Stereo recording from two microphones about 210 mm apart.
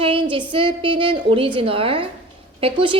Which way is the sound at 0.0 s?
25° right (ahead or behind).